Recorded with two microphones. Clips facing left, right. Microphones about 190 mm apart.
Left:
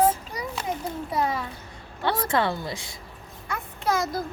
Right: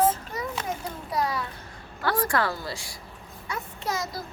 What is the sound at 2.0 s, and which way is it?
Speech, 20° left (ahead or behind).